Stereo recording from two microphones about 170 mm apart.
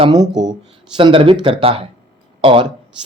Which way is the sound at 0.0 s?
25° right (ahead or behind).